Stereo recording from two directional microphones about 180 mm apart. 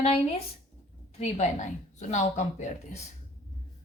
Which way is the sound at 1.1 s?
35° left (ahead or behind).